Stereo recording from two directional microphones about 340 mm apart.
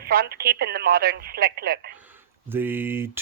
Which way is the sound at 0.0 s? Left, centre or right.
Right.